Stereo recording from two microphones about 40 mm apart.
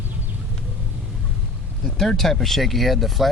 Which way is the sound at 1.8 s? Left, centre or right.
Centre.